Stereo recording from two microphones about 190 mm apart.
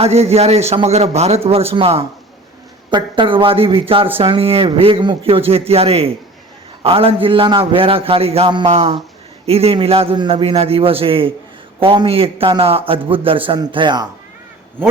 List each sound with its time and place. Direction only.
0.0 s a man's voice: 35° right (ahead or behind)